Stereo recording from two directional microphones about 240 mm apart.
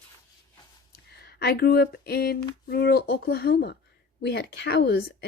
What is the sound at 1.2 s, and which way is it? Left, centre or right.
A woman's voice, left.